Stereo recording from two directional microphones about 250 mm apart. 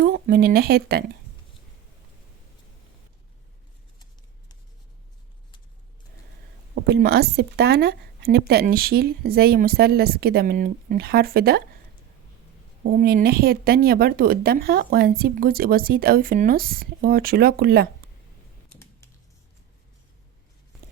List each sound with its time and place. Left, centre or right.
0.0 s speech: right
6.8 s speech: right
12.8 s speech: right